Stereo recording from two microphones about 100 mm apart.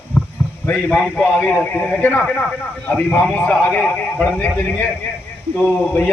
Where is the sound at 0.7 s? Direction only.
15° left (ahead or behind).